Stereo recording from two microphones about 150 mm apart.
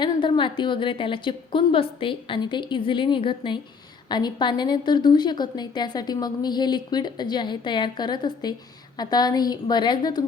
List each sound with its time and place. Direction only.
0.0 s a woman's voice: 35° left (ahead or behind)